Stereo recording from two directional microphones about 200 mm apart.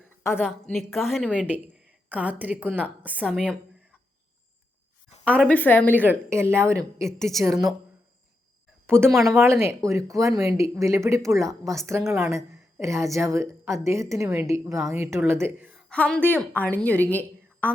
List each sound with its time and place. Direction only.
0.2 s a woman's voice: 15° left (ahead or behind)
0.7 s a woman's voice: centre (ahead or behind)
1.5 s a woman's voice: 10° right (ahead or behind)
5.2 s a woman's voice: 5° left (ahead or behind)
5.9 s a woman's voice: 10° right (ahead or behind)
7.2 s a woman's voice: centre (ahead or behind)
7.4 s a woman's voice: 15° right (ahead or behind)
8.9 s a woman's voice: 10° right (ahead or behind)
15.9 s a woman's voice: 5° left (ahead or behind)